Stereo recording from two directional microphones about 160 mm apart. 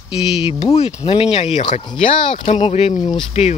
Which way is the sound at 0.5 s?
40° left (ahead or behind).